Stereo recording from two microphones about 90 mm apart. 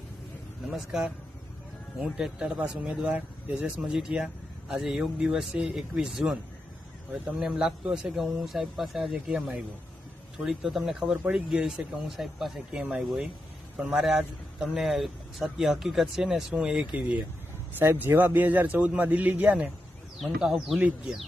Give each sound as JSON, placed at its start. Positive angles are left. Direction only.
{"t": 0.7, "sound": "a man's voice", "side_deg": -5}
{"t": 7.3, "sound": "a man's voice", "side_deg": -5}